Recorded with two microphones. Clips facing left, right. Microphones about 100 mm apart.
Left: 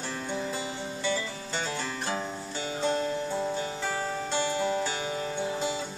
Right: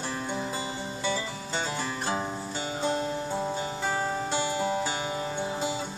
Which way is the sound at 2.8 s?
5° right (ahead or behind).